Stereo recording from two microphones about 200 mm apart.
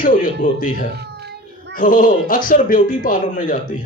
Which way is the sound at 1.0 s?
55° right (ahead or behind).